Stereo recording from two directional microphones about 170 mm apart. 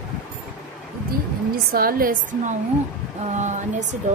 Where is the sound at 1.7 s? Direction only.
60° right (ahead or behind).